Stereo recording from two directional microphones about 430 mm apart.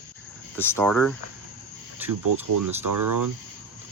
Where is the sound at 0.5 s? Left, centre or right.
Centre.